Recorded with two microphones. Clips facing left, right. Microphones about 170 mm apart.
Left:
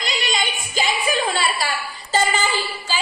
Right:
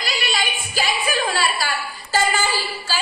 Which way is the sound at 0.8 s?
20° left (ahead or behind).